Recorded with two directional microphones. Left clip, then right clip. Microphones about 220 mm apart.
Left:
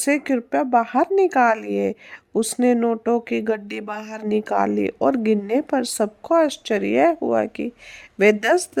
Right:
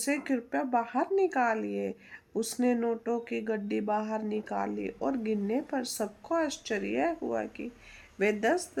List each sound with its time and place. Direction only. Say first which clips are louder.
0.0 s speech: left 10 dB; 45° left (ahead or behind)